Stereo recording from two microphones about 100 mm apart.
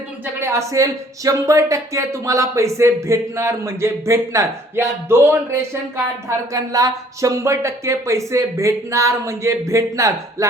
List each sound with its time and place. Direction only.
0.3 s speech: 25° right (ahead or behind)
6.2 s speech: 35° right (ahead or behind)